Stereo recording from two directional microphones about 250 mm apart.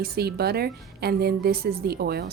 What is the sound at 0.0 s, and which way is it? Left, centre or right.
A woman's voice, right.